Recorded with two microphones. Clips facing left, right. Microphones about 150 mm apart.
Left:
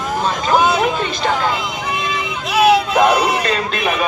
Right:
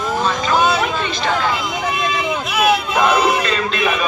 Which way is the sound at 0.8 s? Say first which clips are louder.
Left 2 dB; 45° left (ahead or behind).